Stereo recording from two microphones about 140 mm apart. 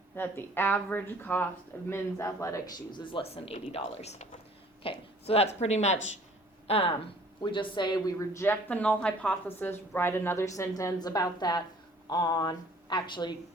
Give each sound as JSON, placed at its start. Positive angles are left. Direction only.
{"t": 0.2, "sound": "a woman's voice", "side_deg": 15}